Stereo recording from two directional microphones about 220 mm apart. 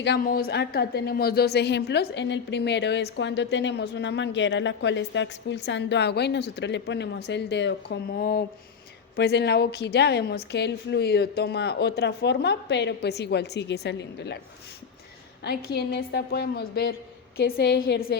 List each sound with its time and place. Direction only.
0.0 s a woman's voice: 45° left (ahead or behind)
15.4 s a woman's voice: 50° left (ahead or behind)